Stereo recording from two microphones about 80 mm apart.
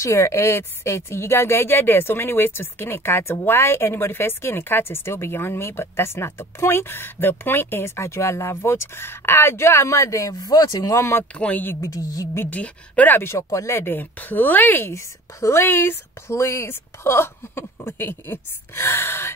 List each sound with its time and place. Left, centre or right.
0.0 s speech: left
11.3 s speech: centre
11.8 s speech: left
12.4 s speech: centre